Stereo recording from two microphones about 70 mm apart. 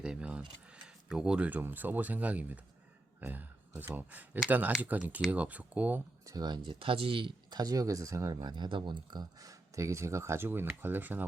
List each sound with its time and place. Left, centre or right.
0.0 s speech: centre
1.5 s speech: right
6.2 s speech: right
8.4 s speech: right